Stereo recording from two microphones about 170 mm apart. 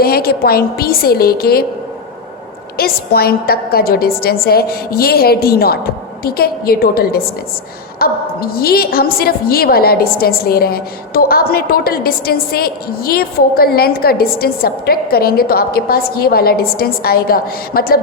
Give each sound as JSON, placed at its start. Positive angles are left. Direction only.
{"t": 0.0, "sound": "a woman's voice", "side_deg": 65}
{"t": 2.7, "sound": "a woman's voice", "side_deg": 65}